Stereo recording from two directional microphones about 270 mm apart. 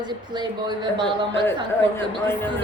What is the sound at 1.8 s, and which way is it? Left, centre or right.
Speech, centre.